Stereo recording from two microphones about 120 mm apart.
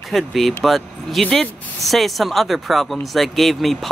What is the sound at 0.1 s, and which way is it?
Speech, centre (ahead or behind).